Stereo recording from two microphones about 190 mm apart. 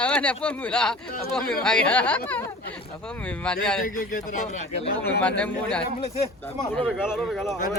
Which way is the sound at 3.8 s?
45° left (ahead or behind).